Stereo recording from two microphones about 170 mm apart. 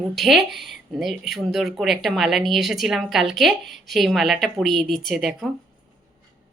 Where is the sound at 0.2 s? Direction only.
Centre (ahead or behind).